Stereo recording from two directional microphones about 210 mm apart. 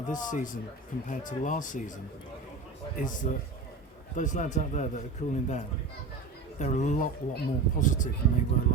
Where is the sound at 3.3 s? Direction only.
35° left (ahead or behind).